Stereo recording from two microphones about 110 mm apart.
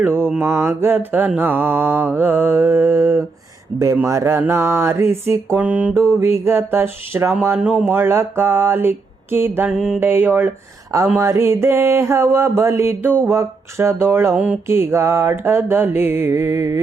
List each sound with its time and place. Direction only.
0.0 s mantra: 20° right (ahead or behind)
6.1 s mantra: 25° right (ahead or behind)
7.6 s mantra: 10° right (ahead or behind)
7.9 s mantra: 20° right (ahead or behind)
9.6 s mantra: 5° right (ahead or behind)
10.0 s mantra: 20° right (ahead or behind)
14.3 s mantra: 10° right (ahead or behind)
14.7 s mantra: 25° right (ahead or behind)